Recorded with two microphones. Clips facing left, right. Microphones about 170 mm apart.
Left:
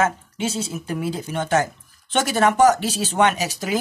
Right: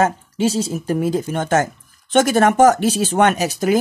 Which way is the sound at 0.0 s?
35° right (ahead or behind).